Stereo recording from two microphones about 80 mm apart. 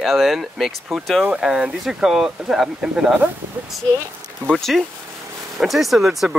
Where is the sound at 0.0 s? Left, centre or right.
Centre.